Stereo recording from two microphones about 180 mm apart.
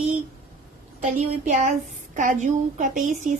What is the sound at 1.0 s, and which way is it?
A woman's voice, 40° right (ahead or behind).